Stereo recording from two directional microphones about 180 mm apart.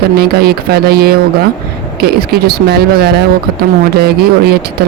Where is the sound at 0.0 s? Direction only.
60° right (ahead or behind).